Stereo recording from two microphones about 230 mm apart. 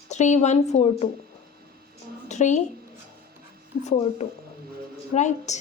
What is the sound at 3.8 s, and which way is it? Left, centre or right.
A woman's voice, left.